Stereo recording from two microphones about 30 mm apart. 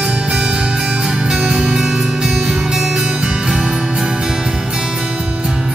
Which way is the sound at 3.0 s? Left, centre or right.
Right.